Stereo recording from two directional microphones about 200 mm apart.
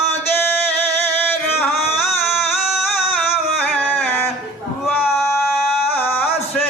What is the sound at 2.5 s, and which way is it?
Music, centre (ahead or behind).